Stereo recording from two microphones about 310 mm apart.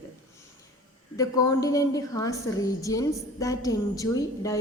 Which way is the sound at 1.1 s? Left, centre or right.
Centre.